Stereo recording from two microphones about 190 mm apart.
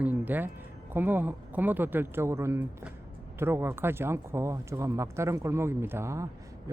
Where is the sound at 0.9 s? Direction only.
10° right (ahead or behind).